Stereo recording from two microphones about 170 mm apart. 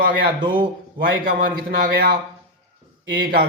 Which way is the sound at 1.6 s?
65° right (ahead or behind).